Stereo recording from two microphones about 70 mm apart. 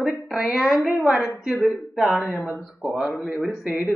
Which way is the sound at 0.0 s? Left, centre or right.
Centre.